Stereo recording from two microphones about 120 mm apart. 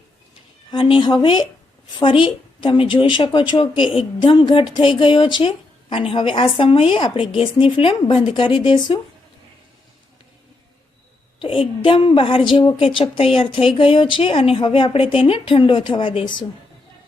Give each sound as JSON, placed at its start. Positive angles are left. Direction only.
{"t": 0.7, "sound": "a woman's voice", "side_deg": 40}
{"t": 11.3, "sound": "a woman's voice", "side_deg": 45}